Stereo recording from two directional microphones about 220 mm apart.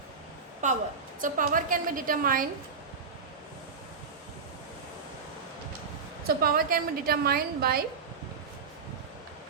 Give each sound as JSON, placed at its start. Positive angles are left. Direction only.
{"t": 0.6, "sound": "a woman's voice", "side_deg": -35}
{"t": 6.2, "sound": "a woman's voice", "side_deg": -40}